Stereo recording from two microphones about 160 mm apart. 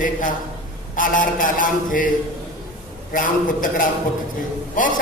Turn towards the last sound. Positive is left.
turn(degrees=55)  # may be behind; listen again after turning